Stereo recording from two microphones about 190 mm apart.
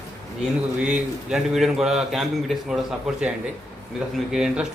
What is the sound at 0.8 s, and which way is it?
A man's voice, 5° right (ahead or behind).